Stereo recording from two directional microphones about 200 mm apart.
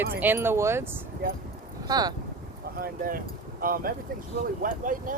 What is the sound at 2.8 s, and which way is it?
Speech, 45° right (ahead or behind).